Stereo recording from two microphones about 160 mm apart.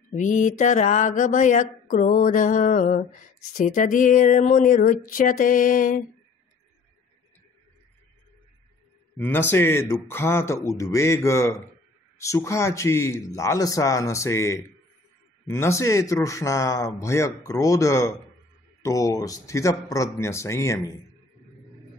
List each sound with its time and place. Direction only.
0.1 s mantra: 50° left (ahead or behind)
9.1 s a man's voice: 15° left (ahead or behind)